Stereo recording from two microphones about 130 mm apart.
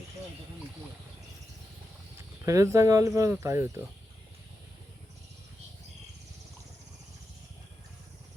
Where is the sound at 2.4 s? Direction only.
25° right (ahead or behind).